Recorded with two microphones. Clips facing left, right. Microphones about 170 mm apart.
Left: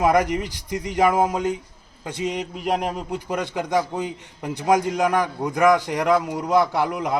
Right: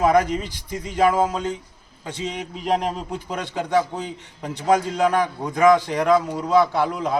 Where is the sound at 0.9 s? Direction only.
15° left (ahead or behind).